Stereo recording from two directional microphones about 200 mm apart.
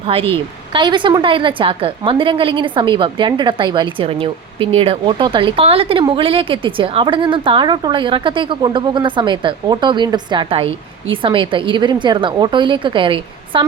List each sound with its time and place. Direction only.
0.0 s a woman's voice: 30° right (ahead or behind)